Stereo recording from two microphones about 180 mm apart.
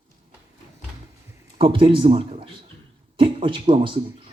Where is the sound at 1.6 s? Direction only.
30° right (ahead or behind).